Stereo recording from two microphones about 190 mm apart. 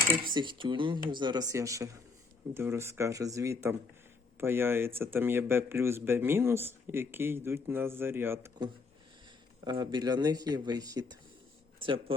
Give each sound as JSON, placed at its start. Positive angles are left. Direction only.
{"t": 0.3, "sound": "speech", "side_deg": -25}